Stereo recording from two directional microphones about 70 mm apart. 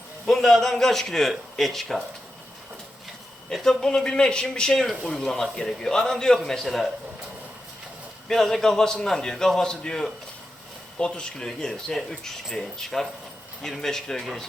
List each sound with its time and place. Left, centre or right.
0.3 s a man's voice: centre
3.5 s speech: centre
8.3 s a man's voice: centre